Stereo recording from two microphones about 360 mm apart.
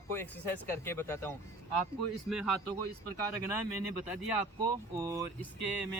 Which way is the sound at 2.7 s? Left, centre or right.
Left.